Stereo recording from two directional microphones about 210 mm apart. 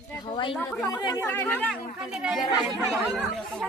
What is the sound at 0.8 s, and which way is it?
Speech, 20° left (ahead or behind).